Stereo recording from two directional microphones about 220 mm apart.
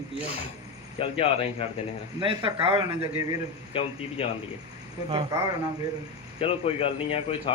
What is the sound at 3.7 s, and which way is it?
Speech, 25° left (ahead or behind).